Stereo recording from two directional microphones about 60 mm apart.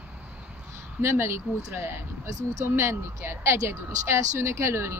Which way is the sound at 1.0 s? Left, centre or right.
Right.